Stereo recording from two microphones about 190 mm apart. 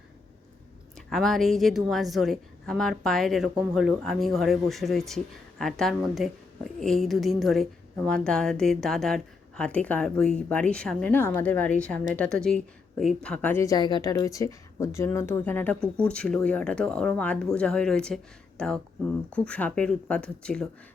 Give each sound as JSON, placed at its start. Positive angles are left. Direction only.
{"t": 0.9, "sound": "a woman's voice", "side_deg": 0}